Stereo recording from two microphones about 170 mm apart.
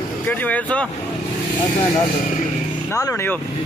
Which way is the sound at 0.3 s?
10° left (ahead or behind).